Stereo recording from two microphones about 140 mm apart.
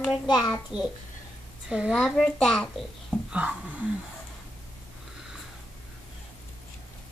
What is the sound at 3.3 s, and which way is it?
Speech, 10° right (ahead or behind).